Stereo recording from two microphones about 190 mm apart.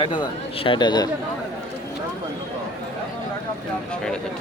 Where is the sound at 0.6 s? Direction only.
25° left (ahead or behind).